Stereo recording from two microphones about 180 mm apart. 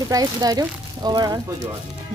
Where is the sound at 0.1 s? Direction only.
20° right (ahead or behind).